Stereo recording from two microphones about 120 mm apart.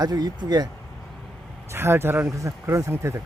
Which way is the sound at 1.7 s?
20° right (ahead or behind).